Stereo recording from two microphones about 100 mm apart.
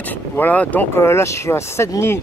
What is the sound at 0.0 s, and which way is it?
Speech, 15° left (ahead or behind).